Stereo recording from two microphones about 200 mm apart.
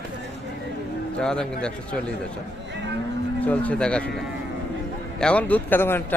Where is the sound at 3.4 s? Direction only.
5° left (ahead or behind).